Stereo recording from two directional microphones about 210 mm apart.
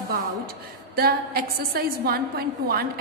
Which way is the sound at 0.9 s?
45° right (ahead or behind).